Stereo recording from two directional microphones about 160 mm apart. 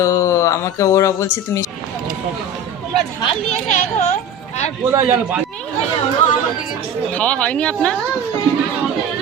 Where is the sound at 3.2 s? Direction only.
45° left (ahead or behind).